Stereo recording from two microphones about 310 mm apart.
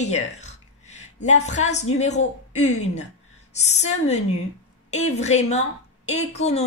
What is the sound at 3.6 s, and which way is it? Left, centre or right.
A woman's voice, left.